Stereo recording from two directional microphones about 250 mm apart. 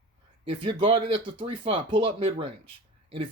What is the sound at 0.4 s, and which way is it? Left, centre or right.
Speech, right.